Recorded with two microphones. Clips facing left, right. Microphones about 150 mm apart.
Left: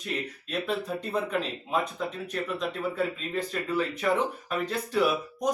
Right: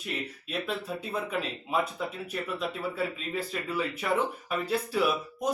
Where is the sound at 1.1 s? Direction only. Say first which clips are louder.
Left 3 dB; 5° right (ahead or behind).